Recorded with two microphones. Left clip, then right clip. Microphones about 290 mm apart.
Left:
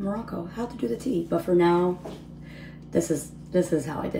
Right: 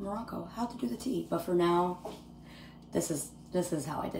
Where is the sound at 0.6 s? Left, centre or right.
Centre.